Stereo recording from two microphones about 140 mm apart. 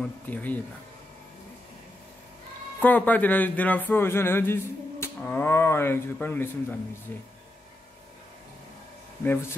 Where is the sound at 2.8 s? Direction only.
10° left (ahead or behind).